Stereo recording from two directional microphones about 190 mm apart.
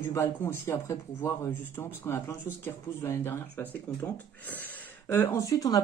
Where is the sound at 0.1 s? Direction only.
10° left (ahead or behind).